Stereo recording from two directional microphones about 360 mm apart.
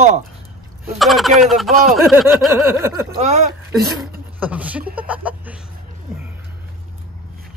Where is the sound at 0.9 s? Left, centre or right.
Centre.